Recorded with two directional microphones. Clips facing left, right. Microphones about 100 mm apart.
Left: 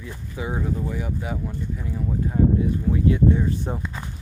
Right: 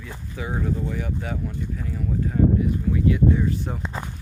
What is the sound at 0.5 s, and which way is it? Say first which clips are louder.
Speech: right 1 dB; 10° left (ahead or behind).